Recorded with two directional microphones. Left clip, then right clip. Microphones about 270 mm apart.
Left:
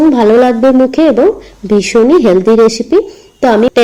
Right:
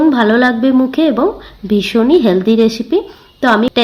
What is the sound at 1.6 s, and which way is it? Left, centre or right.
Speech, centre.